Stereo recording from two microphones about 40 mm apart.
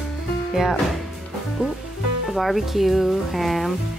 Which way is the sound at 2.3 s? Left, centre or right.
Centre.